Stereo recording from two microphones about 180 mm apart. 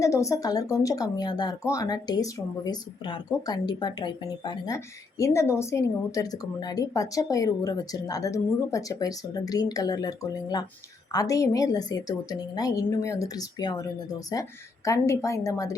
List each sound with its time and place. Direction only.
0.0 s a woman's voice: 15° left (ahead or behind)